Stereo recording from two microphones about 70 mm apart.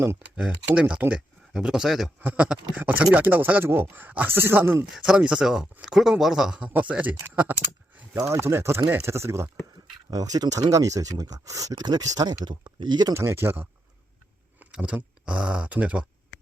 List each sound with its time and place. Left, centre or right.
0.3 s a man's voice: centre
2.2 s speech: centre
4.9 s a man's voice: centre
6.7 s speech: right
8.3 s speech: right
10.1 s speech: right
12.8 s speech: right
13.1 s speech: right
14.7 s a man's voice: centre